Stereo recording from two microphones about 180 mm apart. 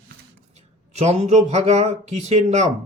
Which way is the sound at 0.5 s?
40° right (ahead or behind).